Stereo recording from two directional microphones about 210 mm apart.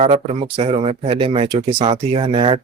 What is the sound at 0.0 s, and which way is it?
Speech, 30° right (ahead or behind).